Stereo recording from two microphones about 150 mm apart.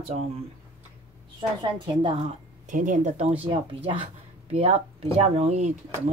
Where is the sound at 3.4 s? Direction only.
35° right (ahead or behind).